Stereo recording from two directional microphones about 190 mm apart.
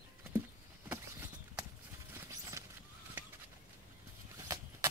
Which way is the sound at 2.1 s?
15° right (ahead or behind).